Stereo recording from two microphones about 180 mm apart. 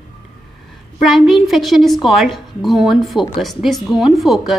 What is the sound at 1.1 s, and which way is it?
A woman's voice, centre (ahead or behind).